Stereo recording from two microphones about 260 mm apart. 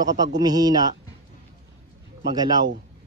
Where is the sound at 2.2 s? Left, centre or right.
Centre.